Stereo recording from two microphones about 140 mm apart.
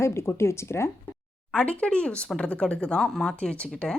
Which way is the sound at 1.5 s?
5° left (ahead or behind).